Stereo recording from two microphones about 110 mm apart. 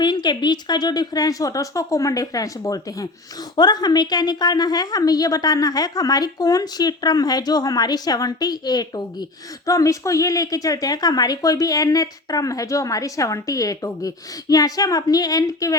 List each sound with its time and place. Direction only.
0.0 s a woman's voice: 40° left (ahead or behind)